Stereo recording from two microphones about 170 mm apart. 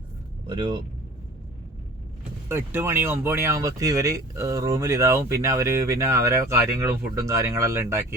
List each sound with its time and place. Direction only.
0.4 s speech: 25° right (ahead or behind)
2.5 s speech: 15° right (ahead or behind)